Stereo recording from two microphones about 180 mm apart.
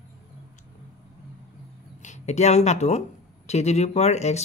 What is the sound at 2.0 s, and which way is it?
Speech, 40° left (ahead or behind).